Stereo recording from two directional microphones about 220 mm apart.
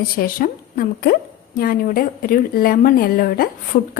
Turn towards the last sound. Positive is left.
turn(degrees=40)  # may be behind; listen again after turning